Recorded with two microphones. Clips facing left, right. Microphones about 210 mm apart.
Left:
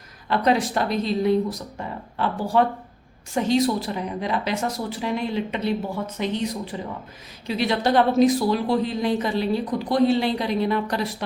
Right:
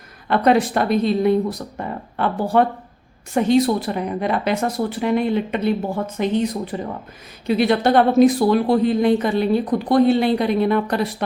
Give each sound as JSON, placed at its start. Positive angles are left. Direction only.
{"t": 0.3, "sound": "a woman's voice", "side_deg": -55}